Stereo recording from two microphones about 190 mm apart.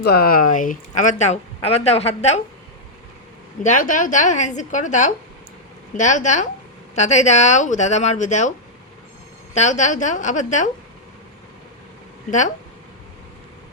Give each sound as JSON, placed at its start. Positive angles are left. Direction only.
{"t": 0.0, "sound": "speech", "side_deg": 55}
{"t": 3.6, "sound": "speech", "side_deg": 40}
{"t": 9.6, "sound": "speech", "side_deg": 40}
{"t": 12.3, "sound": "speech", "side_deg": 40}